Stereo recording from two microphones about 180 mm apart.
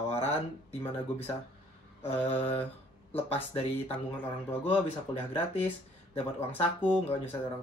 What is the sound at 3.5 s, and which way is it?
Speech, 35° left (ahead or behind).